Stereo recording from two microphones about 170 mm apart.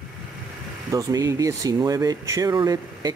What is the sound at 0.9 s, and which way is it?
Speech, 20° right (ahead or behind).